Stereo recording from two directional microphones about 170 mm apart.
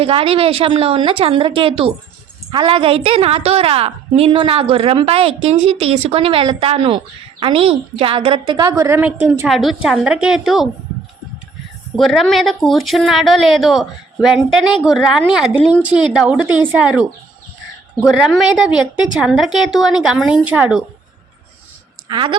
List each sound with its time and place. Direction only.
0.0 s a woman's voice: 35° right (ahead or behind); by 10.7 s centre (ahead or behind)
11.9 s a woman's voice: centre (ahead or behind)
18.1 s a woman's voice: 5° right (ahead or behind)
22.1 s speech: 30° right (ahead or behind)